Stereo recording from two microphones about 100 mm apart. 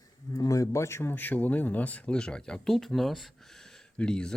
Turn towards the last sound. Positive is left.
turn(degrees=10)  # may be behind; listen again after turning